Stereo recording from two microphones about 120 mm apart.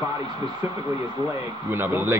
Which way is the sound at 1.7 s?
20° right (ahead or behind).